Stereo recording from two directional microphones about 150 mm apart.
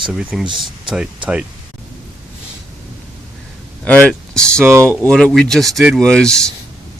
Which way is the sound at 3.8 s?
10° left (ahead or behind).